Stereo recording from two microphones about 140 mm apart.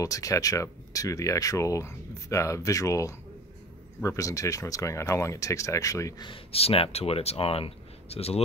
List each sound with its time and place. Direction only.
0.0 s speech: 25° left (ahead or behind); by 8.4 s 45° left (ahead or behind)